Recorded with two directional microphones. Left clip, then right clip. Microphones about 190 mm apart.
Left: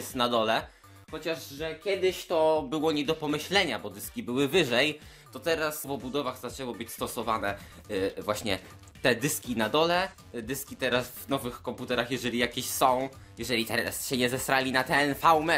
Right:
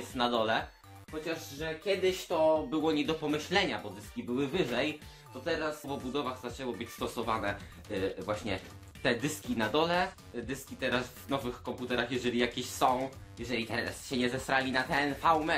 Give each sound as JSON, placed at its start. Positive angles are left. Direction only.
{"t": 0.1, "sound": "speech", "side_deg": 40}
{"t": 1.2, "sound": "speech", "side_deg": 60}
{"t": 2.8, "sound": "speech", "side_deg": 40}
{"t": 4.4, "sound": "speech", "side_deg": 50}